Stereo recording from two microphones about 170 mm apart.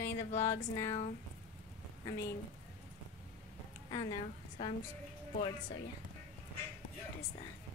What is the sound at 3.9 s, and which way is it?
Speech, 25° left (ahead or behind).